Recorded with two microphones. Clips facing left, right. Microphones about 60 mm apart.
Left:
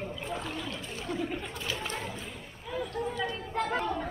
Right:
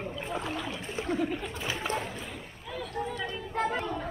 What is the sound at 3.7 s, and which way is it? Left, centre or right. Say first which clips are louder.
Speech: left 2 dB; centre.